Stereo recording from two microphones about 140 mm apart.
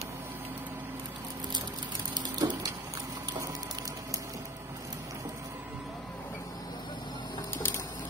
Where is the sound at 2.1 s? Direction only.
30° right (ahead or behind).